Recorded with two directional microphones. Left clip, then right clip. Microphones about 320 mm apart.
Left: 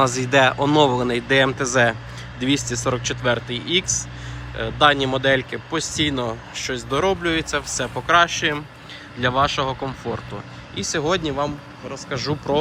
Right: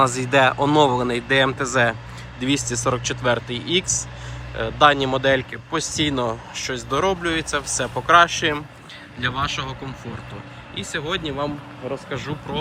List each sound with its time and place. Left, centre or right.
0.0 s speech: centre
11.3 s speech: centre